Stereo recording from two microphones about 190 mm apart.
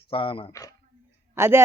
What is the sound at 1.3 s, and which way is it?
Speech, 15° right (ahead or behind).